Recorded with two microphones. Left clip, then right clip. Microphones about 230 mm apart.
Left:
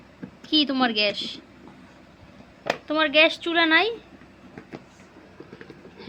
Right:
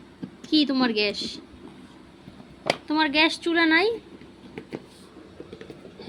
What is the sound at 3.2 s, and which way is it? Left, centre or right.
Speech, centre.